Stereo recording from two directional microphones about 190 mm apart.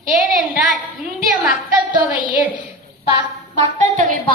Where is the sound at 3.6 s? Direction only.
40° right (ahead or behind).